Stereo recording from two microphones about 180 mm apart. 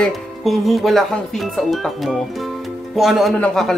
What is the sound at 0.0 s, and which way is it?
Speech, centre (ahead or behind).